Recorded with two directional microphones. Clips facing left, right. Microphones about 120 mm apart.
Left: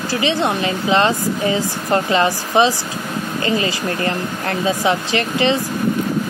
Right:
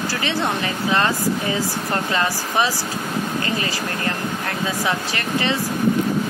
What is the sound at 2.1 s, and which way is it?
Speech, 25° left (ahead or behind).